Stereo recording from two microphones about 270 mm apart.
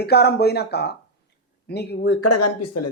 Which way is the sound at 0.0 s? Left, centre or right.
Left.